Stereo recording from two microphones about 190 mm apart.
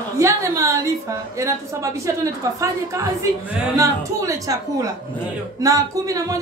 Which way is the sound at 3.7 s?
15° right (ahead or behind).